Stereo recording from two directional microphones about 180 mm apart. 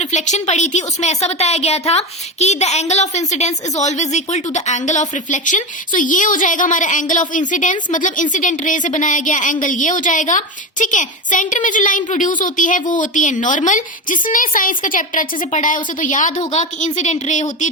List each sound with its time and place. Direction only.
0.0 s a woman's voice: 40° left (ahead or behind)